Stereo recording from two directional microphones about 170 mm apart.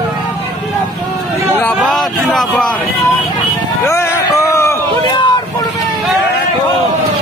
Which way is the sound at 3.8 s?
15° left (ahead or behind).